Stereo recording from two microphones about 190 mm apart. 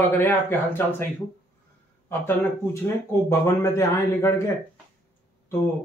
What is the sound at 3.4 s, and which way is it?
Speech, 15° left (ahead or behind).